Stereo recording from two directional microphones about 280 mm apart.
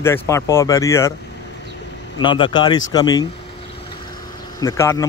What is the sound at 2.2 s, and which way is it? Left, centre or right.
Speech, centre.